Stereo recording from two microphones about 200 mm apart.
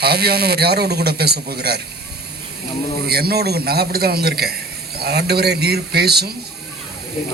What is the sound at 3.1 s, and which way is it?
Speech, 50° right (ahead or behind).